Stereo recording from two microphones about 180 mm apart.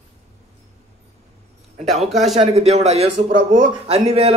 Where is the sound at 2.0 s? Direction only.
Centre (ahead or behind).